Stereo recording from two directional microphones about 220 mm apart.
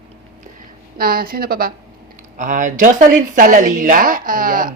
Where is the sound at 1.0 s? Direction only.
40° right (ahead or behind).